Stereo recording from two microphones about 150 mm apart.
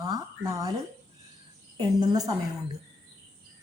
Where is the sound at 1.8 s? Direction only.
30° right (ahead or behind).